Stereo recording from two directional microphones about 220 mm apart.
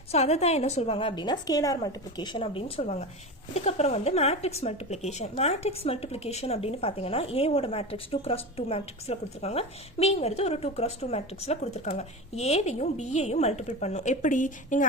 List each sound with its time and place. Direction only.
0.1 s speech: 30° left (ahead or behind)